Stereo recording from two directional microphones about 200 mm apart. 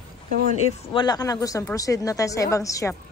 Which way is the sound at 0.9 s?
20° left (ahead or behind).